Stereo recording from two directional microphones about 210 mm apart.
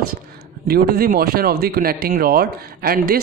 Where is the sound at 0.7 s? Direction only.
45° right (ahead or behind).